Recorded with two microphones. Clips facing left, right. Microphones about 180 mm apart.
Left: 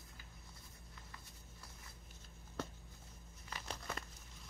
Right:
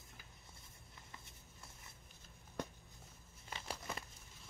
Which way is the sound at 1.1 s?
25° right (ahead or behind).